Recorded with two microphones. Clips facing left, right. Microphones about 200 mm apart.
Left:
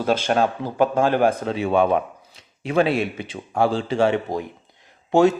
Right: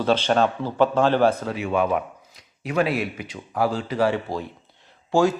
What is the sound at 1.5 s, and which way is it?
Speech, 30° left (ahead or behind).